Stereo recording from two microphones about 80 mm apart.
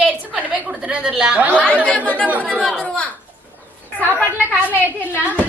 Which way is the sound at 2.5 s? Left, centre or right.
Centre.